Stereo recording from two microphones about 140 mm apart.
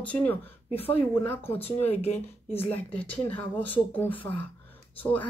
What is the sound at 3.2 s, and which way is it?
Speech, 15° left (ahead or behind).